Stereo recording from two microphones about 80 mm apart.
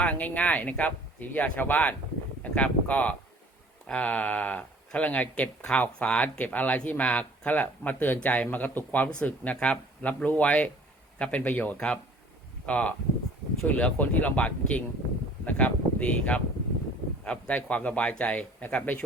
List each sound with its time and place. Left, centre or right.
0.0 s speech: centre